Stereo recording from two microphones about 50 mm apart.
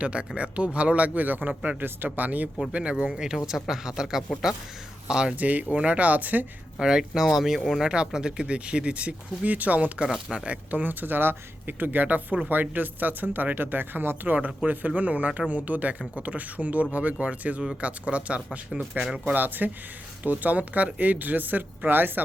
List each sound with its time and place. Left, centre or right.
0.0 s speech: right
3.2 s speech: centre
5.4 s speech: right
6.7 s speech: centre
7.8 s speech: centre; by 14.3 s right
14.3 s speech: right
19.0 s speech: right